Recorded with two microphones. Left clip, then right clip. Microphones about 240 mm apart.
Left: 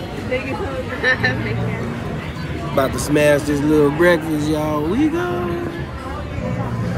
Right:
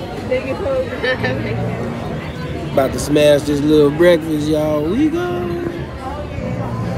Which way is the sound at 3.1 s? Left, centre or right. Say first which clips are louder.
Right 3 dB; centre.